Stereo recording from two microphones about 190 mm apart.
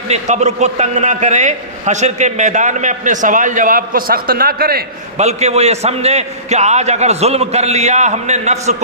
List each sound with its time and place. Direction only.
0.1 s a man's voice: 35° right (ahead or behind); by 4.8 s 50° right (ahead or behind)
5.1 s a man's voice: 35° right (ahead or behind)